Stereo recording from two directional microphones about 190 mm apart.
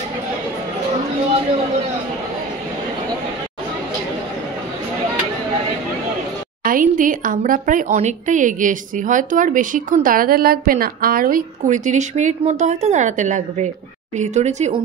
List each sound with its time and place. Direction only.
6.6 s a woman's voice: 45° right (ahead or behind)